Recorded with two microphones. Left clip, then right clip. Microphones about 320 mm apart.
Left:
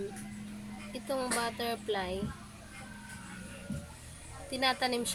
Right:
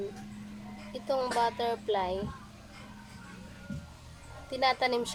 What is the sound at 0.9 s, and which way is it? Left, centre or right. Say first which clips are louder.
Speech: right 4 dB; centre.